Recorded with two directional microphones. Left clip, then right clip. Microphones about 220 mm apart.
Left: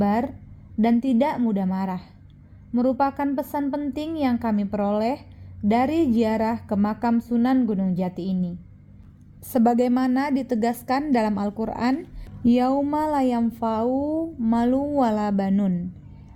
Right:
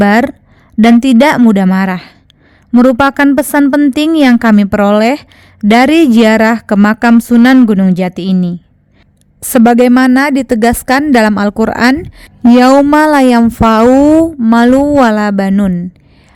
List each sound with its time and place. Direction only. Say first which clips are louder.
0.0 s a woman's voice: right 15 dB; 40° right (ahead or behind)
2.7 s a woman's voice: right 15 dB; 50° right (ahead or behind)